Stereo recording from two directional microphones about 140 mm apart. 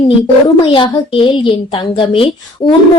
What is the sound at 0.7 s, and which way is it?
A woman's voice, 40° left (ahead or behind).